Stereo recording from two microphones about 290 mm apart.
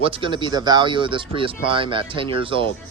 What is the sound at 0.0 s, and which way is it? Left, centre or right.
Speech, centre.